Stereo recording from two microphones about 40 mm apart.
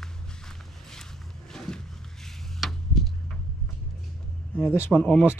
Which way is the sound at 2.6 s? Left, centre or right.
Centre.